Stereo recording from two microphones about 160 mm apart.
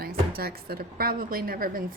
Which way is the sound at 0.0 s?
70° right (ahead or behind).